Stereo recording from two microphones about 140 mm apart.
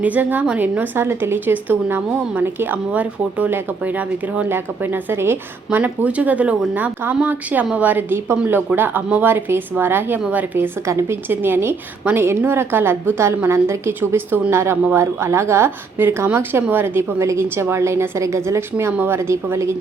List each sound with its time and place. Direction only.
0.0 s a woman's voice: 10° right (ahead or behind)